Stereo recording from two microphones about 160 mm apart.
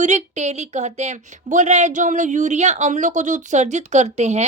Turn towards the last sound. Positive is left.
turn(degrees=-45)  # may be behind; listen again after turning